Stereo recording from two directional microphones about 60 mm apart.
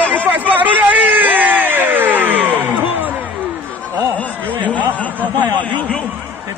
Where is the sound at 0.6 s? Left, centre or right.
Right.